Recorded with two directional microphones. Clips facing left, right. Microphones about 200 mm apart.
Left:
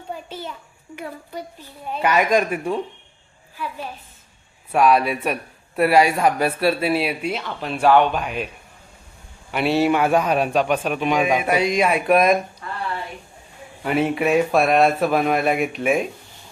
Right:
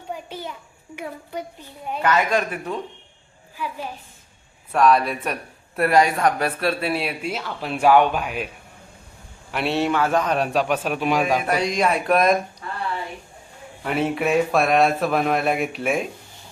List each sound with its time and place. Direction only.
0.1 s a child's voice: 15° right (ahead or behind)
2.0 s speech: 15° left (ahead or behind)
3.6 s a woman's voice: 15° right (ahead or behind)
4.7 s speech: 5° left (ahead or behind)
9.5 s speech: centre (ahead or behind)
9.9 s speech: 15° left (ahead or behind)
13.8 s speech: centre (ahead or behind)